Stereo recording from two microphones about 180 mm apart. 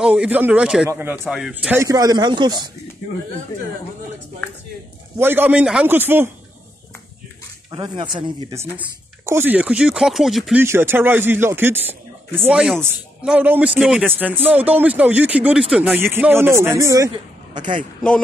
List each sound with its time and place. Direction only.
0.0 s speech: 5° right (ahead or behind); by 2.5 s 25° right (ahead or behind)
5.2 s speech: 10° right (ahead or behind)
7.7 s speech: 25° right (ahead or behind)
8.5 s speech: 15° right (ahead or behind)
10.6 s speech: 15° right (ahead or behind)
17.1 s a woman's voice: 25° right (ahead or behind)